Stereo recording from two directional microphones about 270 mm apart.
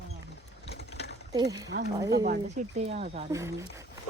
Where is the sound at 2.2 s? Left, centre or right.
Right.